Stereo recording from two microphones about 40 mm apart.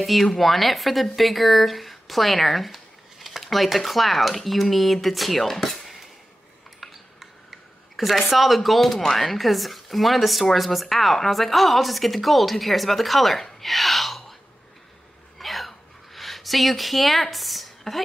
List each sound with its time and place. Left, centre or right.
0.0 s speech: centre
6.8 s tick: centre
7.9 s speech: centre
15.3 s a sound: centre